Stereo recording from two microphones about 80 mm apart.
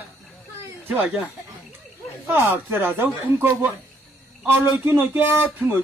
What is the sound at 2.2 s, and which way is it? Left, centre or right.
Speech, right.